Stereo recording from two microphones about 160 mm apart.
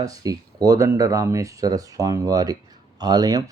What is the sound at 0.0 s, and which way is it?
Speech, 20° right (ahead or behind).